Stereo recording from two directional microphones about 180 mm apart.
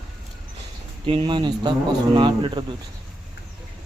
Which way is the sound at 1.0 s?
30° right (ahead or behind).